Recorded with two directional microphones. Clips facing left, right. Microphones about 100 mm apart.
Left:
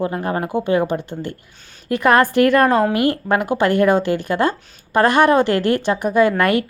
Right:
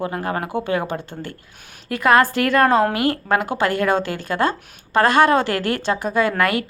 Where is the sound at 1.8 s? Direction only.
25° left (ahead or behind).